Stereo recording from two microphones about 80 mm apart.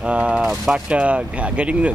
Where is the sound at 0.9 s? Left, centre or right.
Centre.